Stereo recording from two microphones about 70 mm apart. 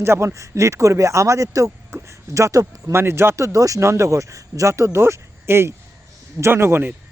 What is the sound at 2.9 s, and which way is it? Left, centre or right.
A man's voice, right.